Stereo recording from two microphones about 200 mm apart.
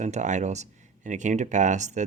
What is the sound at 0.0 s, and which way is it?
Speech, 35° right (ahead or behind).